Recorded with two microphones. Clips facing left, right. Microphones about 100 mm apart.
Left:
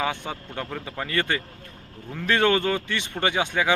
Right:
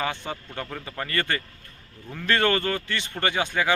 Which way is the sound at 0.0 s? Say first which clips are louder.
Left 2 dB; 5° left (ahead or behind).